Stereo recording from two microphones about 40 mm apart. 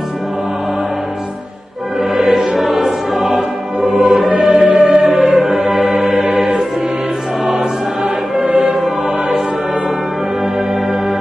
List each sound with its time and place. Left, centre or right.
2.2 s music: centre
4.5 s music: right
5.3 s music: centre
8.7 s music: centre
10.4 s music: centre